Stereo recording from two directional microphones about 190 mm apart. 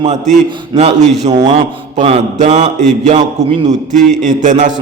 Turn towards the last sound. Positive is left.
turn(degrees=-40)  # may be behind; listen again after turning